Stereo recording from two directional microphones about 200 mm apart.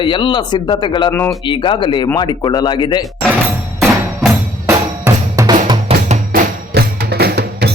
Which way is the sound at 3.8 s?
5° right (ahead or behind).